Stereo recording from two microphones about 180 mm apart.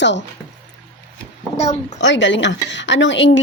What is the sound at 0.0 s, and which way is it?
Speech, 80° left.